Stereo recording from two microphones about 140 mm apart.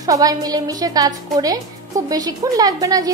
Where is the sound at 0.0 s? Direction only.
25° right (ahead or behind).